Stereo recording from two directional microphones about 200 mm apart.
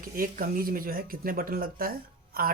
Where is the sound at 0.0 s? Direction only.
45° right (ahead or behind).